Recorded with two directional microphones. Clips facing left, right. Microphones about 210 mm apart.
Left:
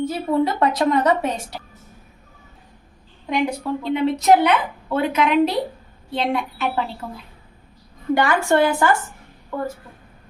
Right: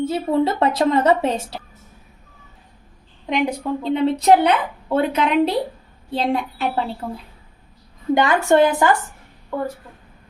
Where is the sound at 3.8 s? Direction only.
30° right (ahead or behind).